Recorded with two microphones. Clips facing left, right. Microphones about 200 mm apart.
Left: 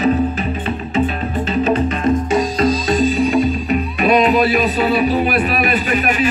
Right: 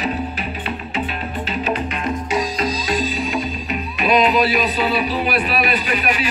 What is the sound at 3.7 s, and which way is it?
Speech, 45° left (ahead or behind).